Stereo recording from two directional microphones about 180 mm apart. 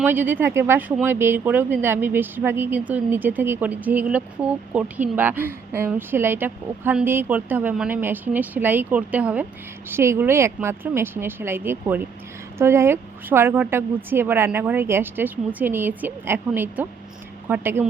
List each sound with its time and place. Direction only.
0.0 s speech: 10° right (ahead or behind)